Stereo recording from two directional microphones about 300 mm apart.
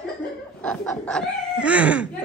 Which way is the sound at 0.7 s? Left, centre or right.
Centre.